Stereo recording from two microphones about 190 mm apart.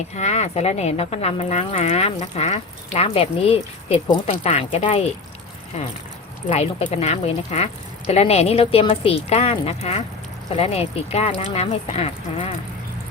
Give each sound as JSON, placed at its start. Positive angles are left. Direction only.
{"t": 0.2, "sound": "speech", "side_deg": 35}
{"t": 6.5, "sound": "speech", "side_deg": 35}